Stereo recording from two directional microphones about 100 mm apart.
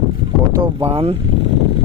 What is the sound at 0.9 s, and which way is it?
Speech, 90° right.